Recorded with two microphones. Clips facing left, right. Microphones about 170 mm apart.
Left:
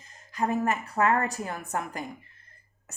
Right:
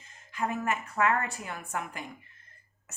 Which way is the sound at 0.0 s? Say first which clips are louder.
Left 4 dB; 40° left (ahead or behind).